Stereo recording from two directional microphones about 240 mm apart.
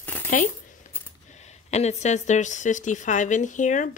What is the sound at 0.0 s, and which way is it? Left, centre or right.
Coin, centre.